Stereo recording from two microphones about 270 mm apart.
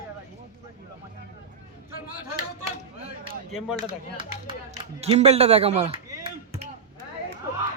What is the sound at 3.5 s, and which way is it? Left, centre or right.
Speech, centre.